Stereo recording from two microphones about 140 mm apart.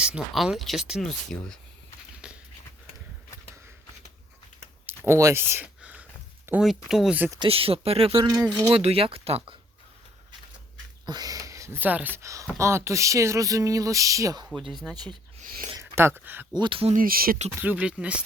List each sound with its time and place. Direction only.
0.0 s speech: 5° right (ahead or behind)
2.2 s a sound: 5° right (ahead or behind)
4.9 s a sound: 20° right (ahead or behind)
6.8 s speech: 5° right (ahead or behind)
7.4 s speech: 40° right (ahead or behind)
11.0 s speech: 30° right (ahead or behind)
14.5 s speech: centre (ahead or behind)
15.8 s speech: 20° right (ahead or behind)
16.6 s speech: 40° right (ahead or behind)
16.9 s speech: 90° right
17.6 s speech: 10° right (ahead or behind)